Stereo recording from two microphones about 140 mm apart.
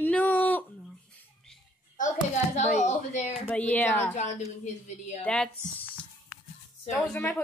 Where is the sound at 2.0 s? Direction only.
60° left (ahead or behind).